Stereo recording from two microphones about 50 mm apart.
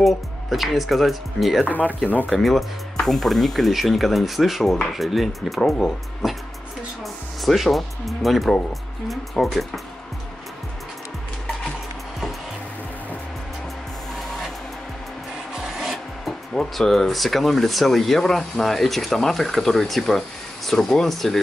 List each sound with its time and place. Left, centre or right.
0.0 s speech: centre
1.7 s speech: left
2.2 s speech: centre
7.4 s speech: centre
15.5 s filing: centre
16.5 s speech: centre